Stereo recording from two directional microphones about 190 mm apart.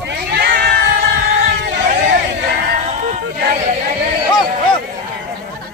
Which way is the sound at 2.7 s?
40° right (ahead or behind).